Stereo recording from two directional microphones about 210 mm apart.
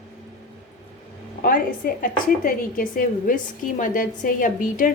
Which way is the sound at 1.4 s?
40° left (ahead or behind).